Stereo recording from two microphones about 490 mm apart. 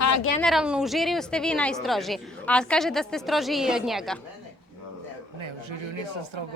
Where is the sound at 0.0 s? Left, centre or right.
Left.